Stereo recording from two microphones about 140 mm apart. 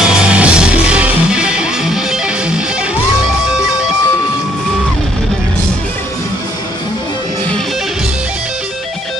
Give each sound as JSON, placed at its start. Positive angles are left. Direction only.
{"t": 0.0, "sound": "music", "side_deg": -5}